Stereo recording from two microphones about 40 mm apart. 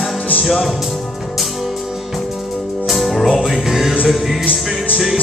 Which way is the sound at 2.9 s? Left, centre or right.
Centre.